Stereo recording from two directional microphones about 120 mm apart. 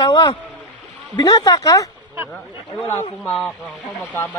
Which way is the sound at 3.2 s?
5° left (ahead or behind).